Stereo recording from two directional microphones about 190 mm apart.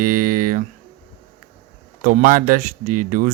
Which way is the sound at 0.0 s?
50° right (ahead or behind).